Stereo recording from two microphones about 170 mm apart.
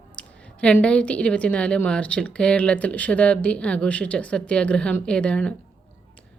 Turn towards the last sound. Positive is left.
turn(degrees=5)  # may be behind; listen again after turning